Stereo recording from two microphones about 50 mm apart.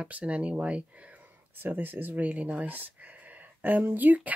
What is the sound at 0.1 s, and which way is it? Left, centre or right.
Speech, right.